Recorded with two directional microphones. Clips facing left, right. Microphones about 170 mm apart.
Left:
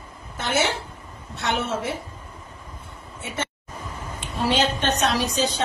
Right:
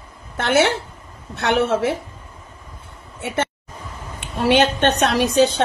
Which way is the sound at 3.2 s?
65° right (ahead or behind).